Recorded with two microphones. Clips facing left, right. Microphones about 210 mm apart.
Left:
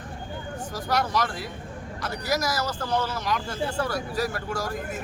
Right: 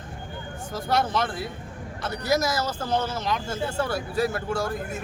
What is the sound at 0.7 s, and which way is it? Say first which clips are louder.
Speech: right 2 dB; 25° right (ahead or behind).